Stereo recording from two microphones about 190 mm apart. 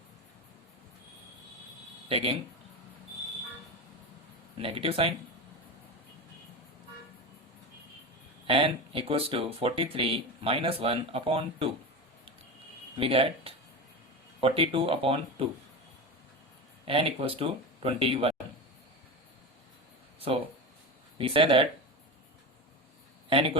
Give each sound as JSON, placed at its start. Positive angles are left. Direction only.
{"t": 2.0, "sound": "speech", "side_deg": -30}
{"t": 4.5, "sound": "speech", "side_deg": -30}
{"t": 8.4, "sound": "speech", "side_deg": -30}
{"t": 13.0, "sound": "speech", "side_deg": -30}
{"t": 16.8, "sound": "speech", "side_deg": -30}
{"t": 20.1, "sound": "a sound", "side_deg": -30}
{"t": 21.2, "sound": "speech", "side_deg": -30}